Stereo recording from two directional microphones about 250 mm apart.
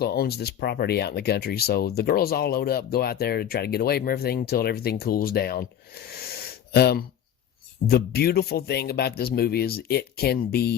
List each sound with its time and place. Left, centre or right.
0.0 s speech: left